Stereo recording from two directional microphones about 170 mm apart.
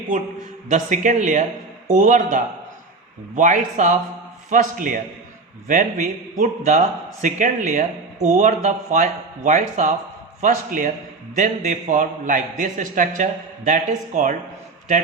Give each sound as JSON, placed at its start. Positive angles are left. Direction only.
{"t": 0.7, "sound": "a man's voice", "side_deg": -45}